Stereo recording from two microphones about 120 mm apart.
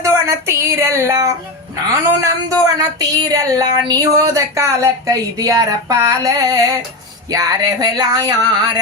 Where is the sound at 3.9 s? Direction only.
30° right (ahead or behind).